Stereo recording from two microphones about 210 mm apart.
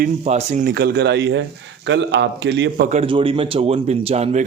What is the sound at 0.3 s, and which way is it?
Speech, 35° right (ahead or behind).